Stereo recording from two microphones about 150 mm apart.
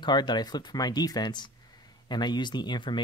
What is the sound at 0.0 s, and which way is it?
Speech, 30° left (ahead or behind).